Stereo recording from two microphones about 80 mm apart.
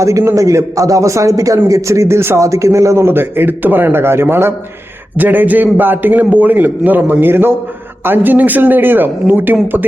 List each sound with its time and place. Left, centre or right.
0.0 s a man's voice: right